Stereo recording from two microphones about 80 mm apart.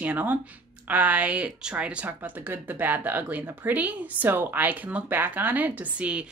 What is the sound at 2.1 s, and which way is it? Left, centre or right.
Speech, right.